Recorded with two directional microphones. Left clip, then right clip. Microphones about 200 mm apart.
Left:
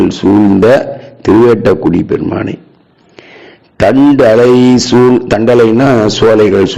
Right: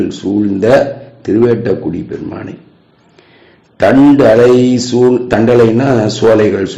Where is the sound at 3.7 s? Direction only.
35° left (ahead or behind).